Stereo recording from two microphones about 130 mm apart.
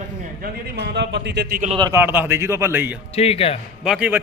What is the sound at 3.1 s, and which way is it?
Speech, 50° left (ahead or behind).